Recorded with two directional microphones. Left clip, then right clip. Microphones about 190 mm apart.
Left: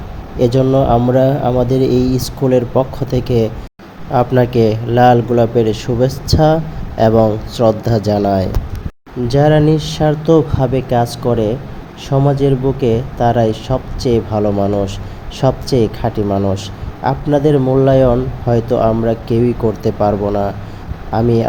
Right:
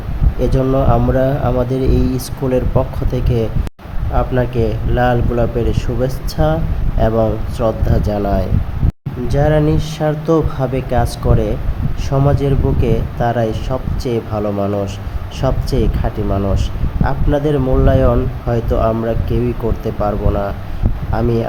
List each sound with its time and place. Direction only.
0.3 s speech: 10° left (ahead or behind)